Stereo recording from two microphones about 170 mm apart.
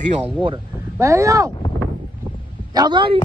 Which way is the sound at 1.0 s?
15° right (ahead or behind).